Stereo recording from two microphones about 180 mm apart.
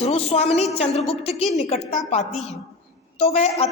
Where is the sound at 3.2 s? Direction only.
35° left (ahead or behind).